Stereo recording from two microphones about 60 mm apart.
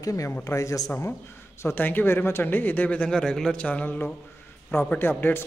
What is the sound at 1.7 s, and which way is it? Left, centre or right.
Speech, left.